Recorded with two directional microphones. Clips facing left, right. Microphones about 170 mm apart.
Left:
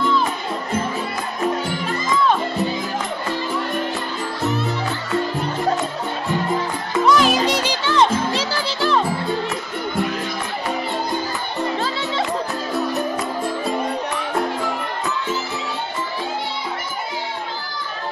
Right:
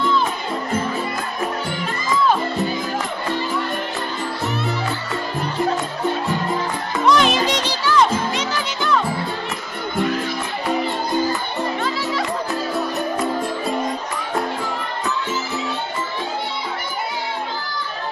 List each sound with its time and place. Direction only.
7.0 s music: centre (ahead or behind)
7.8 s music: 25° left (ahead or behind)
12.9 s music: centre (ahead or behind)